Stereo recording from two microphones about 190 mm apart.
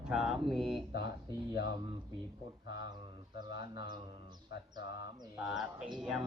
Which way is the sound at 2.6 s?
70° left (ahead or behind).